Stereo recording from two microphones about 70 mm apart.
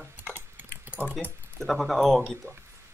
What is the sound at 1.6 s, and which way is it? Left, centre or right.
Speech, centre.